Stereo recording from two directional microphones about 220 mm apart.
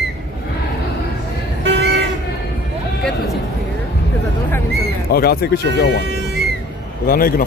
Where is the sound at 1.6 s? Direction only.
50° right (ahead or behind).